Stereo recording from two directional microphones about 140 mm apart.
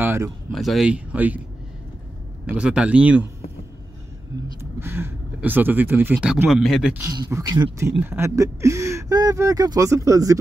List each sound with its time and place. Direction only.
0.0 s a sound: 15° right (ahead or behind)
0.5 s speech: centre (ahead or behind)
2.4 s speech: 10° right (ahead or behind)
4.6 s speech: 15° right (ahead or behind)
6.2 s speech: centre (ahead or behind)
6.9 s speech: 20° right (ahead or behind)
8.0 s speech: 15° right (ahead or behind)